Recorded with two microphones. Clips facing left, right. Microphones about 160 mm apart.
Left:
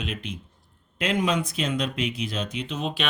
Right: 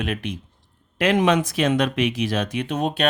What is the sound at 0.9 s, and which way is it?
Speech, 75° right (ahead or behind).